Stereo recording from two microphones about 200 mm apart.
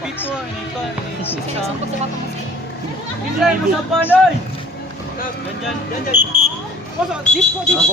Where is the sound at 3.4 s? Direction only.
Centre (ahead or behind).